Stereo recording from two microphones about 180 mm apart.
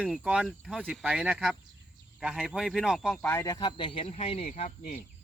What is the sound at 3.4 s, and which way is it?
Speech, 20° left (ahead or behind).